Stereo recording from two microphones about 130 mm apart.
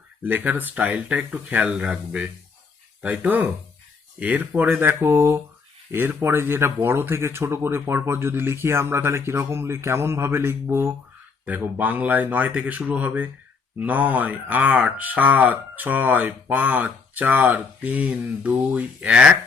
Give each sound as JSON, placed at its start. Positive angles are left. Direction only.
{"t": 0.2, "sound": "speech", "side_deg": -15}